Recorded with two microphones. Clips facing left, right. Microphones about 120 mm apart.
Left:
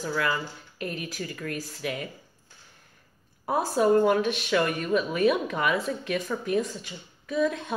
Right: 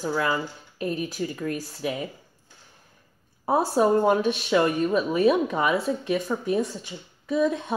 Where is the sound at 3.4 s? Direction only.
30° right (ahead or behind).